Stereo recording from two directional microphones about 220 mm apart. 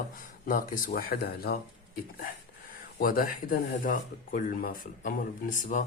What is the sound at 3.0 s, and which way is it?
Speech, 40° left (ahead or behind).